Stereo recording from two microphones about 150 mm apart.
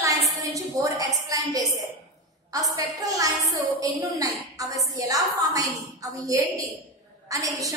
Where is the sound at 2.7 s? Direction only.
25° right (ahead or behind).